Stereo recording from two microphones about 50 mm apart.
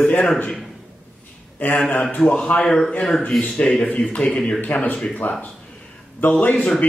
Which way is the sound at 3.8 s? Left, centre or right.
Left.